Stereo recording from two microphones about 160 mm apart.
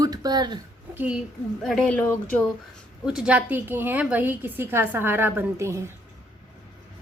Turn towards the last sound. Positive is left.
turn(degrees=-15)  # may be behind; listen again after turning